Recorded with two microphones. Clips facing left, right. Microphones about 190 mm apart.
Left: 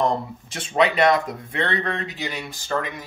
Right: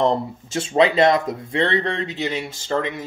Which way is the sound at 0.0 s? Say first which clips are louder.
Right 3 dB; 25° right (ahead or behind).